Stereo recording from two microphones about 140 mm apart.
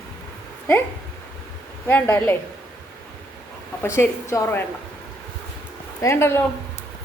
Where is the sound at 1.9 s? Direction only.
15° left (ahead or behind).